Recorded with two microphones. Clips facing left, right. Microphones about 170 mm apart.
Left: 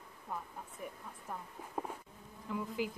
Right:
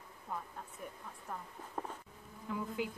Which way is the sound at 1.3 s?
10° left (ahead or behind).